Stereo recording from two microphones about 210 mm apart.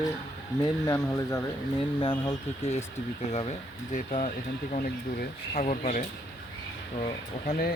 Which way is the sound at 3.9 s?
40° left (ahead or behind).